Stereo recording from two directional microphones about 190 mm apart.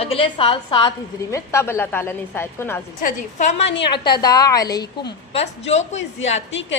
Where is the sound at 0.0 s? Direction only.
30° left (ahead or behind); by 2.8 s 10° left (ahead or behind).